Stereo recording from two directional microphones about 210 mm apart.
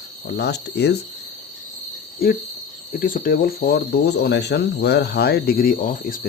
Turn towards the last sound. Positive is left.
turn(degrees=40)  # may be behind; listen again after turning